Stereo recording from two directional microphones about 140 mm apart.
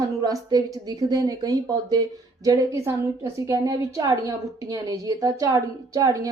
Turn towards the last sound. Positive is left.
turn(degrees=-25)  # may be behind; listen again after turning